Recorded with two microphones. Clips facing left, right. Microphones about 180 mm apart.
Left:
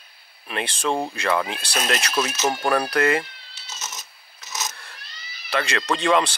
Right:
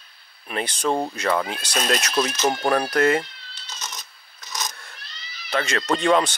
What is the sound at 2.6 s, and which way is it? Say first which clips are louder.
Speech: even; 10° right (ahead or behind).